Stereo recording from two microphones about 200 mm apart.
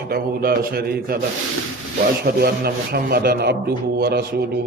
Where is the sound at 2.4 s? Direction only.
50° right (ahead or behind).